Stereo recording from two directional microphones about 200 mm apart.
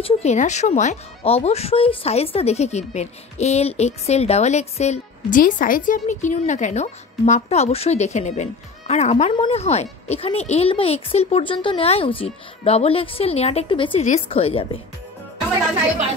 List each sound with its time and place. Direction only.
0.0 s a woman's voice: 35° left (ahead or behind)